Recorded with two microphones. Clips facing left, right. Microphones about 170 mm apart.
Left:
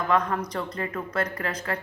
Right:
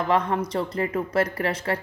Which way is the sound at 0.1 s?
25° right (ahead or behind).